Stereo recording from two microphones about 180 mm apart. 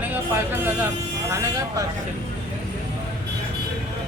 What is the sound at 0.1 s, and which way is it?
Speech, 10° right (ahead or behind).